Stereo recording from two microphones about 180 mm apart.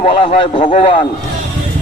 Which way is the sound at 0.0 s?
35° left (ahead or behind).